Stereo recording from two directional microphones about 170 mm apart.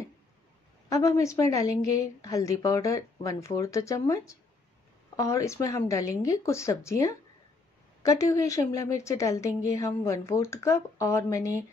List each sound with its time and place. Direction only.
0.8 s a woman's voice: 20° left (ahead or behind)